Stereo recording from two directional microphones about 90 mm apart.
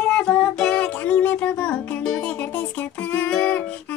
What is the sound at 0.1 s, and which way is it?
Music, 10° left (ahead or behind).